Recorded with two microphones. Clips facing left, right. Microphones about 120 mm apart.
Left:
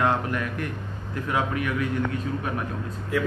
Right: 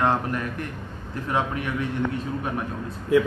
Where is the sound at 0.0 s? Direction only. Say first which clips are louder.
Right 1 dB; 30° right (ahead or behind).